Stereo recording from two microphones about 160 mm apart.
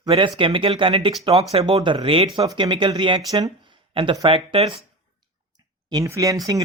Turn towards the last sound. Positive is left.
turn(degrees=-20)  # may be behind; listen again after turning